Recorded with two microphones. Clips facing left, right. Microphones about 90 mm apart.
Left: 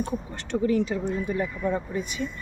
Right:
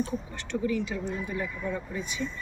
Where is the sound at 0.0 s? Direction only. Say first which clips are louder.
Left 2 dB; 50° left (ahead or behind).